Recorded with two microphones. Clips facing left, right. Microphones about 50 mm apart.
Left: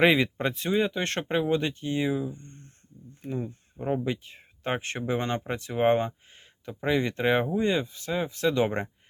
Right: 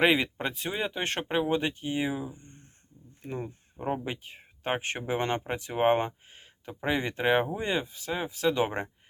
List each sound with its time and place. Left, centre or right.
0.0 s speech: centre
3.2 s speech: right
3.8 s speech: right